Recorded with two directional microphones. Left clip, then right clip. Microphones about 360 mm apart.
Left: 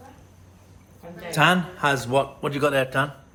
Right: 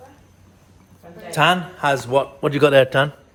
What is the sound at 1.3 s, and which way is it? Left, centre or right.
A man's voice, centre.